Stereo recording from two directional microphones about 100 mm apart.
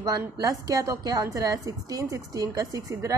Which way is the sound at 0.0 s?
35° right (ahead or behind).